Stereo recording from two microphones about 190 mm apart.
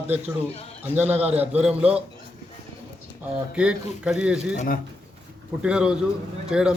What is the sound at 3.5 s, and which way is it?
Speech, 5° right (ahead or behind).